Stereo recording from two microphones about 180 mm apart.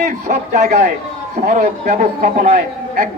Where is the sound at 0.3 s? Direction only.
40° right (ahead or behind).